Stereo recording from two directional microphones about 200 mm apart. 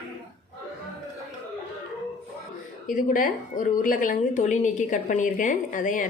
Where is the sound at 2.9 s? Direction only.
40° left (ahead or behind).